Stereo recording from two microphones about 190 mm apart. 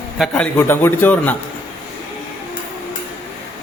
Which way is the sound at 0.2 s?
5° left (ahead or behind).